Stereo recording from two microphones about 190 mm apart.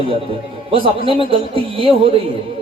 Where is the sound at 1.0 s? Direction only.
30° right (ahead or behind).